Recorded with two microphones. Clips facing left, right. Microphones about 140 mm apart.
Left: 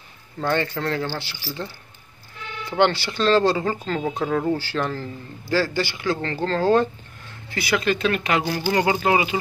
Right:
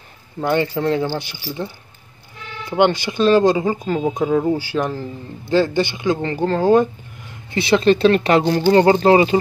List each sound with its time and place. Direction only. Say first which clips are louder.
0.4 s speech: right 5 dB; 15° right (ahead or behind)
2.7 s speech: right 4 dB; 15° right (ahead or behind)
7.5 s speech: right 8 dB; 25° right (ahead or behind)